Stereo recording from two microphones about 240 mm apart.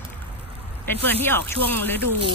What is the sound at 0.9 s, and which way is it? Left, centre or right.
Speech, centre.